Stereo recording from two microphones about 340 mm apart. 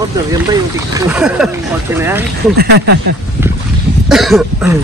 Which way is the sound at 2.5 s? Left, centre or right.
Right.